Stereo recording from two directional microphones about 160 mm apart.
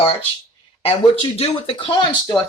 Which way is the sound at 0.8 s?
35° left (ahead or behind).